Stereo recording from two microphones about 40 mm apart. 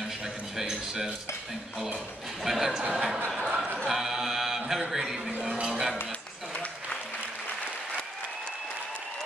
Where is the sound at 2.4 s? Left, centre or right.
Centre.